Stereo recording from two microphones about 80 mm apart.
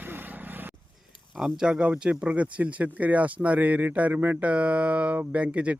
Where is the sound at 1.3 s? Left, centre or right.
Centre.